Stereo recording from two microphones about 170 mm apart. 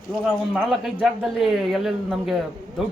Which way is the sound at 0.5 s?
5° right (ahead or behind).